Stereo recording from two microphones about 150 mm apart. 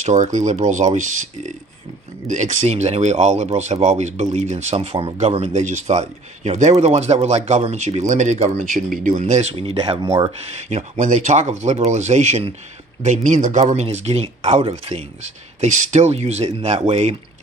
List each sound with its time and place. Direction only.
0.0 s speech: 55° right (ahead or behind)
9.2 s speech: 45° right (ahead or behind)
10.0 s speech: 25° right (ahead or behind)
10.5 s speech: 50° right (ahead or behind)
15.6 s speech: 55° right (ahead or behind)